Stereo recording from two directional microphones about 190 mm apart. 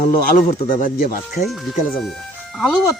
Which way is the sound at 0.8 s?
50° left (ahead or behind).